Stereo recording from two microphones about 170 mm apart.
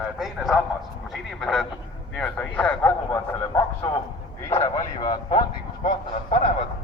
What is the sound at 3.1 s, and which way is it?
Speech, 20° left (ahead or behind).